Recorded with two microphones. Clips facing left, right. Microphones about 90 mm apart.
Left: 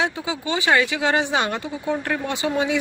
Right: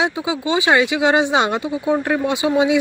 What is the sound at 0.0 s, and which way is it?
Speech, 15° right (ahead or behind).